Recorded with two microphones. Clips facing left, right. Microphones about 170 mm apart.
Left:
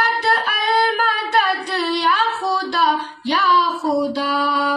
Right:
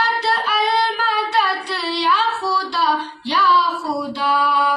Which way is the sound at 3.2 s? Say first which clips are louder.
Even; 45° left (ahead or behind).